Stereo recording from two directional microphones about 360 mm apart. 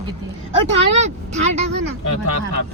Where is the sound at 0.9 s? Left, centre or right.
Centre.